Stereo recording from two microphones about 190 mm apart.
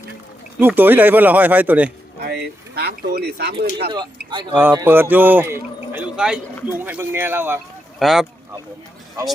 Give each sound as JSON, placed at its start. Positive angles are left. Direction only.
{"t": 0.6, "sound": "speech", "side_deg": -10}
{"t": 2.2, "sound": "speech", "side_deg": -60}
{"t": 3.9, "sound": "speech", "side_deg": -25}
{"t": 4.5, "sound": "speech", "side_deg": -15}